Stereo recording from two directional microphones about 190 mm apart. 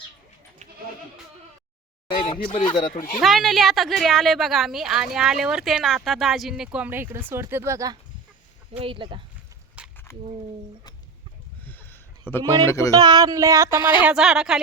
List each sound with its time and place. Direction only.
2.3 s speech: 30° left (ahead or behind)
3.2 s speech: centre (ahead or behind); by 7.9 s 15° right (ahead or behind)
8.7 s speech: 30° right (ahead or behind)
9.8 s a sound: 5° right (ahead or behind)
11.6 s a sound: 10° left (ahead or behind)
12.3 s speech: 10° left (ahead or behind)
12.9 s speech: 20° right (ahead or behind)
14.0 s speech: 5° right (ahead or behind)